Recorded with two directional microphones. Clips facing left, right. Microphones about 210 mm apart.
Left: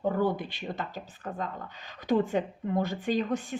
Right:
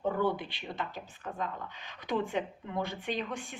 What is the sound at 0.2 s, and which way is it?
A woman's voice, 45° left (ahead or behind).